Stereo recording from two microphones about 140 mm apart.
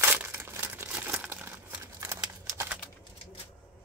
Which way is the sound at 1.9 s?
20° right (ahead or behind).